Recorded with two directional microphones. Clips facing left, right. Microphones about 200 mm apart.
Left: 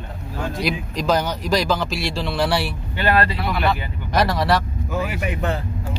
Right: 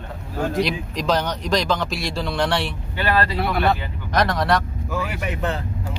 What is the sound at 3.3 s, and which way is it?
Speech, 50° right (ahead or behind).